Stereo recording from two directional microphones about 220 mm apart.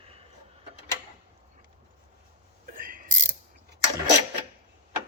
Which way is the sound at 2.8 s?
40° right (ahead or behind).